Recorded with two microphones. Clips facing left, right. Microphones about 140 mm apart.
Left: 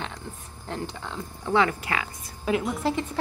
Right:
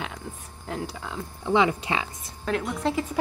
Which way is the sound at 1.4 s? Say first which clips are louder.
Right 1 dB; 15° right (ahead or behind).